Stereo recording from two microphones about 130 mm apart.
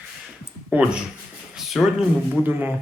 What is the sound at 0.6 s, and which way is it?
Speech, 10° right (ahead or behind).